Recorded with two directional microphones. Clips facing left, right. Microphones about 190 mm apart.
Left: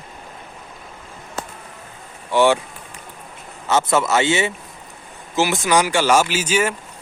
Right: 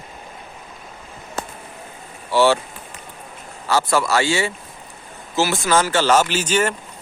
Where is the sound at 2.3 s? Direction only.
15° left (ahead or behind).